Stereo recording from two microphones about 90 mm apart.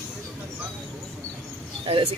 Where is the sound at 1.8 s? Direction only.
90° right.